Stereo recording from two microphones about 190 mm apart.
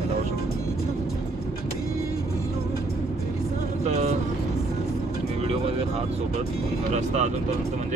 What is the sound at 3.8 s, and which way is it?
Speech, 35° right (ahead or behind).